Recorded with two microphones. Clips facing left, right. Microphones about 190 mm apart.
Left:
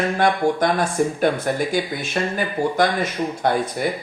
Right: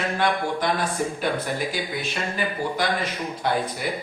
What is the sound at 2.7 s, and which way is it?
A man's voice, 50° left (ahead or behind).